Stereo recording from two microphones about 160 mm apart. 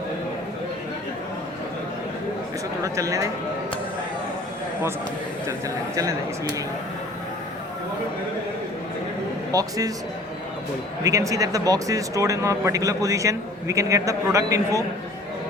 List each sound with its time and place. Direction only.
2.8 s speech: 20° right (ahead or behind)
5.5 s speech: 20° right (ahead or behind)
9.5 s speech: 20° right (ahead or behind)
11.0 s speech: 20° right (ahead or behind)